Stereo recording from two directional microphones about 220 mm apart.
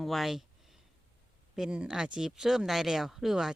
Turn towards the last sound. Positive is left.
turn(degrees=0)  # may be behind; listen again after turning